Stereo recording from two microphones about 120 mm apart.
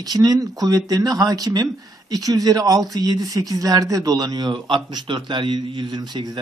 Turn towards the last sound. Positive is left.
turn(degrees=-35)  # may be behind; listen again after turning